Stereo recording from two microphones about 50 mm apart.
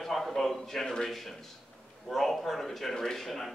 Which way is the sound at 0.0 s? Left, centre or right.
Centre.